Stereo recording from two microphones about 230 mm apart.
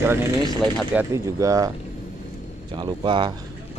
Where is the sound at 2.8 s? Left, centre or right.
Right.